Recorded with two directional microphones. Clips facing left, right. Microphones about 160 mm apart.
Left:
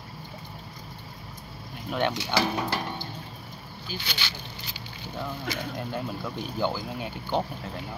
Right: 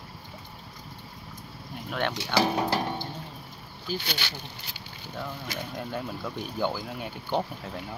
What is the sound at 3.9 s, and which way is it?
Speech, 45° right (ahead or behind).